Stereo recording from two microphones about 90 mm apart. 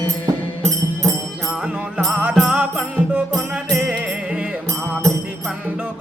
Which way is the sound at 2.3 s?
5° right (ahead or behind).